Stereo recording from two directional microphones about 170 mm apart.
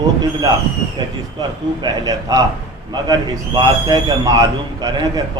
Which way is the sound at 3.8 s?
20° right (ahead or behind).